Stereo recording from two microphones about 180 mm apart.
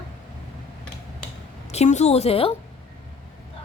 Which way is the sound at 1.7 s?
40° left (ahead or behind).